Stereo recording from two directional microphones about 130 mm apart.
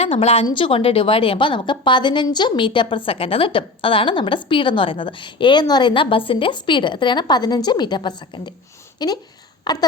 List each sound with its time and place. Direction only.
0.0 s a woman's voice: 50° left (ahead or behind); by 9.8 s 30° left (ahead or behind)